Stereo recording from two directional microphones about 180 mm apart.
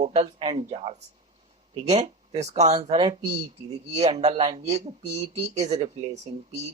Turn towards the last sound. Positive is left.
turn(degrees=-35)  # may be behind; listen again after turning